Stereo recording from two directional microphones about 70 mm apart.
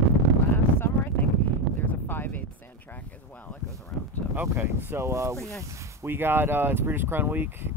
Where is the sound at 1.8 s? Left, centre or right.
Left.